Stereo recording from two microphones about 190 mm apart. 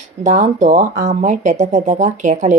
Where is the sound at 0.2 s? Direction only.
40° right (ahead or behind).